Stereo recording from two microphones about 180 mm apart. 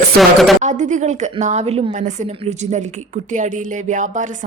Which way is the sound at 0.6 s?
40° right (ahead or behind).